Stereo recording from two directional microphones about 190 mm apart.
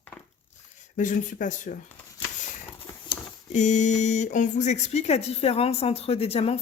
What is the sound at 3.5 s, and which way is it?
Speech, 40° left (ahead or behind).